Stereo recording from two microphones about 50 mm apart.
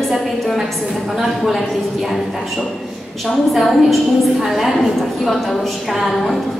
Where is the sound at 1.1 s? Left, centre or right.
Centre.